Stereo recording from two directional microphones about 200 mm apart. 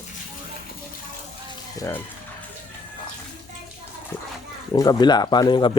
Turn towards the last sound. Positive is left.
turn(degrees=25)  # may be behind; listen again after turning